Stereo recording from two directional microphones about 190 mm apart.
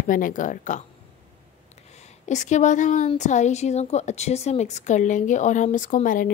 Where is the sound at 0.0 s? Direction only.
45° left (ahead or behind).